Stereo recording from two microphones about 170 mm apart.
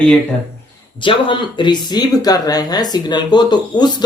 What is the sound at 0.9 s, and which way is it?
Speech, 30° left (ahead or behind).